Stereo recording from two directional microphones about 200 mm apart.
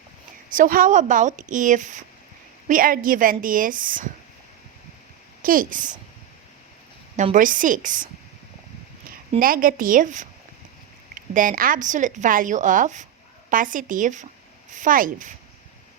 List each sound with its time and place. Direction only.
0.5 s a woman's voice: 45° right (ahead or behind)
5.4 s speech: 45° right (ahead or behind)
7.2 s speech: 40° right (ahead or behind)
9.4 s a woman's voice: 45° right (ahead or behind)
11.3 s speech: 45° right (ahead or behind)